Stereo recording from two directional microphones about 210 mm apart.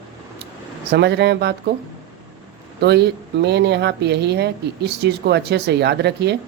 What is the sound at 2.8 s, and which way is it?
Speech, 50° right (ahead or behind).